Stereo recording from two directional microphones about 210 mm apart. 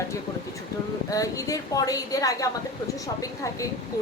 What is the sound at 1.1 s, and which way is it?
A woman's voice, 15° left (ahead or behind).